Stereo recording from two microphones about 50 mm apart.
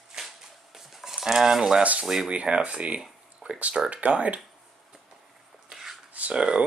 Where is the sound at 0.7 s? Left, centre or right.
Centre.